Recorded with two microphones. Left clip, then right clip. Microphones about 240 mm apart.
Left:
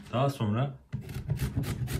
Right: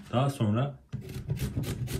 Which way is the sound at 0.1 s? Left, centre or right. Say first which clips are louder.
Even; left.